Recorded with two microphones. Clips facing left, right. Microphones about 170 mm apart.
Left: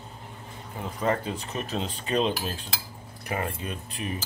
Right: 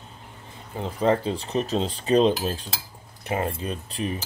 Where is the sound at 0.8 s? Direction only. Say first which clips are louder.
Right 5 dB; 30° right (ahead or behind).